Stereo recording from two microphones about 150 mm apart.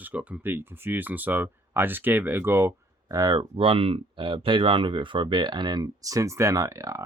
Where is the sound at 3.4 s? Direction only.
35° right (ahead or behind).